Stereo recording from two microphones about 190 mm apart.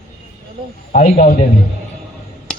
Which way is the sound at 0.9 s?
40° left (ahead or behind).